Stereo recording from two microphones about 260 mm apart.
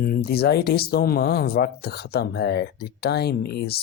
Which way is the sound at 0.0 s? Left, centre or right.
Left.